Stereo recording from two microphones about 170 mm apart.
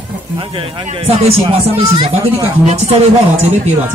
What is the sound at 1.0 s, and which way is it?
Speech, 35° right (ahead or behind).